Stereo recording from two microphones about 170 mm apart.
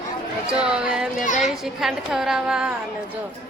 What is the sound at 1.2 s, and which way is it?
Speech, 45° left (ahead or behind).